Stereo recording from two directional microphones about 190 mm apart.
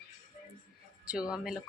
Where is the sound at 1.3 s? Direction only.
Centre (ahead or behind).